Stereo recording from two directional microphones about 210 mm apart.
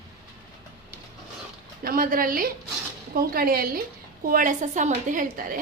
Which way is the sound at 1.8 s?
45° right (ahead or behind).